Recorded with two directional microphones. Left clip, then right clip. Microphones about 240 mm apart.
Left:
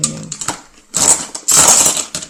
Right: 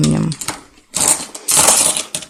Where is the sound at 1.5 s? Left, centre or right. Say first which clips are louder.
Left 3 dB; right.